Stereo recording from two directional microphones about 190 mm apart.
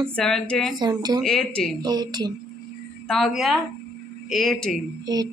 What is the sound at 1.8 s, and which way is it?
Speech, 20° right (ahead or behind).